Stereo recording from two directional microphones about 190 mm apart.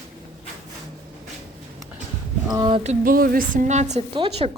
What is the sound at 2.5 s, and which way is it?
A woman's voice, 25° right (ahead or behind).